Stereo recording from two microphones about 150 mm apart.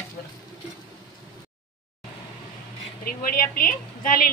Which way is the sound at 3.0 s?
70° left (ahead or behind).